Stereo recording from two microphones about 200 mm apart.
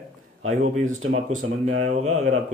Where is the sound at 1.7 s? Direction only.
35° right (ahead or behind).